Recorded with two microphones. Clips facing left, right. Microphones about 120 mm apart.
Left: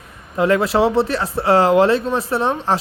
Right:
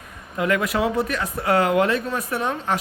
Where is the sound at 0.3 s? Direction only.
30° left (ahead or behind).